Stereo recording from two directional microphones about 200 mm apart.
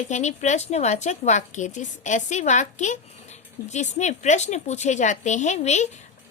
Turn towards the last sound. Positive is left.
turn(degrees=35)  # may be behind; listen again after turning